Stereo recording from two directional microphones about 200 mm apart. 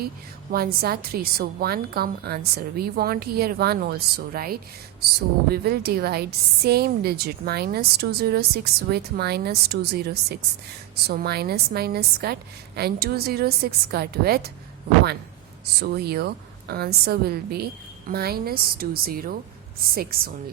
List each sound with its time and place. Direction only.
0.5 s a woman's voice: 50° right (ahead or behind)
15.8 s a woman's voice: 55° right (ahead or behind)